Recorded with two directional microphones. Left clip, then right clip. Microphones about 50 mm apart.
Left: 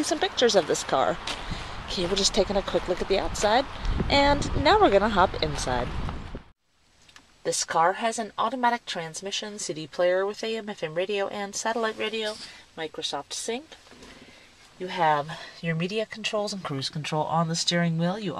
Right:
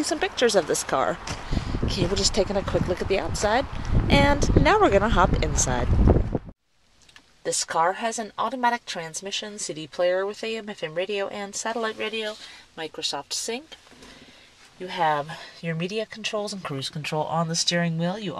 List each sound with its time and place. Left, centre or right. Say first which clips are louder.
0.0 s speech: even; centre
2.2 s speech: left 1 dB; right
3.6 s speech: right 1 dB; centre
4.1 s speech: right 1 dB; right
7.4 s speech: even; centre
12.7 s speech: even; centre
14.8 s speech: even; centre
16.0 s speech: left 1 dB; left